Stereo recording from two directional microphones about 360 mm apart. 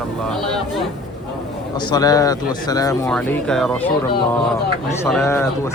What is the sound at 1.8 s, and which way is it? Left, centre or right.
Speech, centre.